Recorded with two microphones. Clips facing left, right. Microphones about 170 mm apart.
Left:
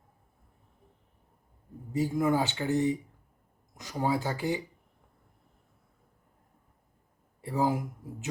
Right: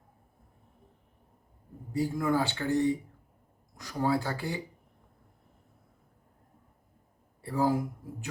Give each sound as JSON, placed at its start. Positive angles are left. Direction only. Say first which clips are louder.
{"t": 1.9, "sound": "speech", "louder": "left 1 dB", "side_deg": 20}
{"t": 7.4, "sound": "speech", "louder": "right 1 dB", "side_deg": 20}